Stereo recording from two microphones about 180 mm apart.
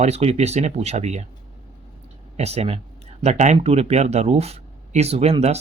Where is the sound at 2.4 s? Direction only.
35° right (ahead or behind).